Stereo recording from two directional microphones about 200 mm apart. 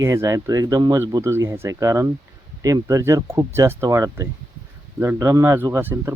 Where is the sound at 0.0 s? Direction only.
15° right (ahead or behind).